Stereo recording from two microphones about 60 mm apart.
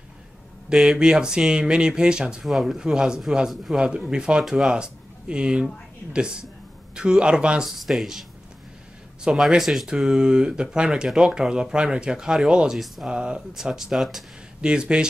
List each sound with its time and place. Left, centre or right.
0.7 s speech: centre
7.8 s speech: centre
9.3 s speech: centre
9.6 s speech: centre
12.7 s speech: centre
13.1 s speech: centre